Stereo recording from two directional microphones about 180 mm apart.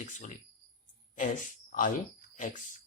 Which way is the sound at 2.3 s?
45° left (ahead or behind).